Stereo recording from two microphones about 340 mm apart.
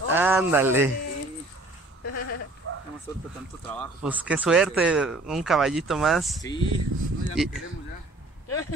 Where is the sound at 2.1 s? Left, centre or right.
Left.